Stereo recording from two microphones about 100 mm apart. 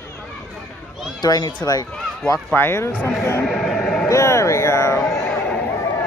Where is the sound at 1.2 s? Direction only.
45° left (ahead or behind).